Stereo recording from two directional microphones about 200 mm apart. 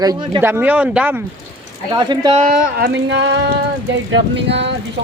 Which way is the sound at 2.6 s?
60° right (ahead or behind).